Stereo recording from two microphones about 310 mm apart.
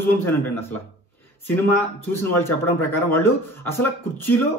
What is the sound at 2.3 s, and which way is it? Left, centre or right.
A man's voice, centre.